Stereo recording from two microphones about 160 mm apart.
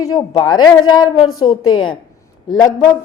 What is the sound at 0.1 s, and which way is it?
A woman's voice, 25° left (ahead or behind).